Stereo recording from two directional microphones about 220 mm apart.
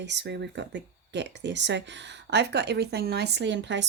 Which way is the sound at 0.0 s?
50° right (ahead or behind).